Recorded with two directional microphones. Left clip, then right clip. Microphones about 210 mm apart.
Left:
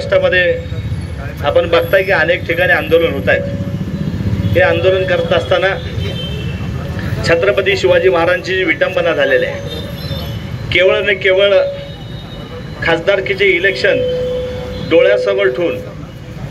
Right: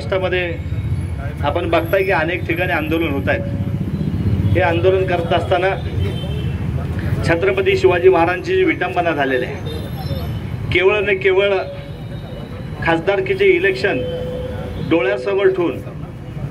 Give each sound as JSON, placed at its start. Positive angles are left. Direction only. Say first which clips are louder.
{"t": 0.1, "sound": "a man's voice", "louder": "left 8 dB", "side_deg": -50}
{"t": 4.6, "sound": "a man's voice", "louder": "left 4 dB", "side_deg": -50}
{"t": 7.2, "sound": "a man's voice", "louder": "left 4 dB", "side_deg": -50}
{"t": 10.7, "sound": "a man's voice", "louder": "left 4 dB", "side_deg": -55}
{"t": 12.8, "sound": "a man's voice", "louder": "left 4 dB", "side_deg": -55}